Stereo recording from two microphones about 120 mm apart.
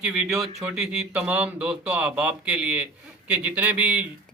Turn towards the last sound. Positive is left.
turn(degrees=-10)  # may be behind; listen again after turning